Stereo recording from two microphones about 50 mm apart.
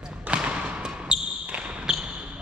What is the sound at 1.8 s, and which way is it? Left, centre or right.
Basketball bounce, centre.